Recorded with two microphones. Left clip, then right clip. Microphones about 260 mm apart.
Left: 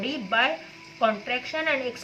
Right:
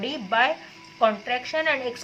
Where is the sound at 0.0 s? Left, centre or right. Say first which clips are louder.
Right 2 dB; right.